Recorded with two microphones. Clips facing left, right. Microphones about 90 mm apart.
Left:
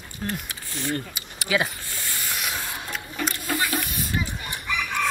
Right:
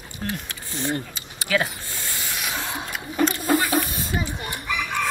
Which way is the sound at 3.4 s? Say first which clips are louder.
Right 6 dB; 35° right (ahead or behind).